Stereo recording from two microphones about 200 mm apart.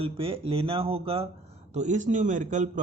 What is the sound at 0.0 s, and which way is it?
A man's voice, 30° right (ahead or behind).